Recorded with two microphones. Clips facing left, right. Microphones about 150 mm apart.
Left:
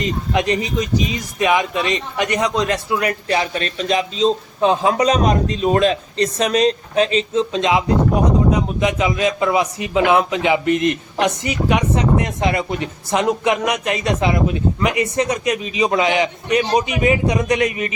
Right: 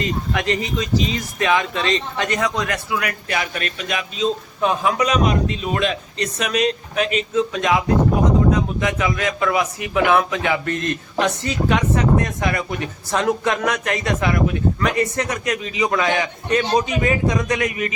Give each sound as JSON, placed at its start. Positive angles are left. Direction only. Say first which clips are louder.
{"t": 0.0, "sound": "speech", "louder": "left 3 dB", "side_deg": 20}